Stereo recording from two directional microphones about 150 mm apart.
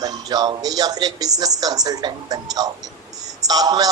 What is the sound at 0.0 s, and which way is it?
A man's voice, 25° right (ahead or behind).